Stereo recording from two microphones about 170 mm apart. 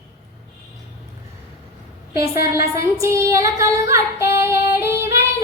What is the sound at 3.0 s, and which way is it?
Female singing, 15° right (ahead or behind).